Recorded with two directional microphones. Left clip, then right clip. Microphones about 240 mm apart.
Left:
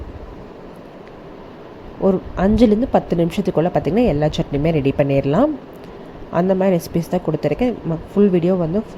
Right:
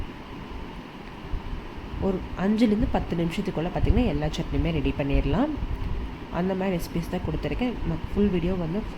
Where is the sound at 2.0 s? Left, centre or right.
Left.